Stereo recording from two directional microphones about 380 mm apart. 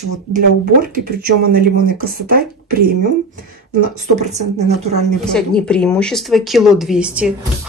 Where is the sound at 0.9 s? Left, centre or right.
Right.